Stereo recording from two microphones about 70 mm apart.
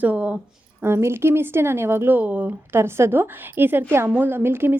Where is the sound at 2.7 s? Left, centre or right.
Right.